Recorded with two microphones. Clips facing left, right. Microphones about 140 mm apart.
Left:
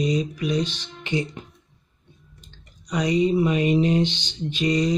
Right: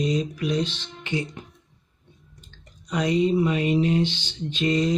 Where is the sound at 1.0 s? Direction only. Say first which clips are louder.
Left 2 dB; 20° left (ahead or behind).